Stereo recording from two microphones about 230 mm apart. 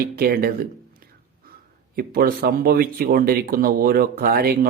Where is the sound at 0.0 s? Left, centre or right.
Right.